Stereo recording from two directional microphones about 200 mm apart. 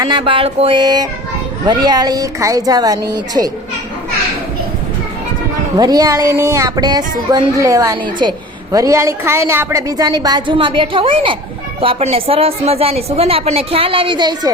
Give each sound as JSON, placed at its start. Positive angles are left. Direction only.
{"t": 0.0, "sound": "a woman's voice", "side_deg": -25}
{"t": 5.7, "sound": "a woman's voice", "side_deg": -20}